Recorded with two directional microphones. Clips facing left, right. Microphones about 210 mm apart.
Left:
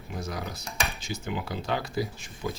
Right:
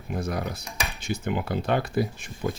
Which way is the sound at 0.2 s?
55° right (ahead or behind).